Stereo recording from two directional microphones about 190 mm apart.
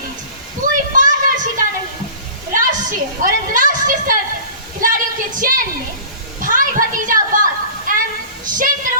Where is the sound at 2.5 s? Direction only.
45° right (ahead or behind).